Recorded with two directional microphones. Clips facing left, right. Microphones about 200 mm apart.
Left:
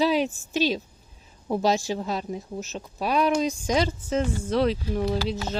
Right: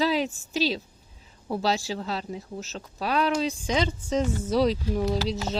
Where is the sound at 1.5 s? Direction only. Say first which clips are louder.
Left 3 dB; 15° left (ahead or behind).